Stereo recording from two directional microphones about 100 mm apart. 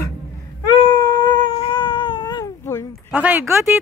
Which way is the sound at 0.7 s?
50° left (ahead or behind).